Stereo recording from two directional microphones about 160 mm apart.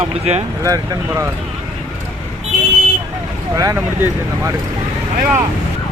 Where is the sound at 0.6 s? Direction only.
20° right (ahead or behind).